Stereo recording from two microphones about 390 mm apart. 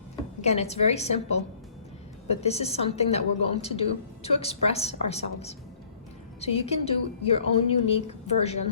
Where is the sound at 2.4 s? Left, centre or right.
Centre.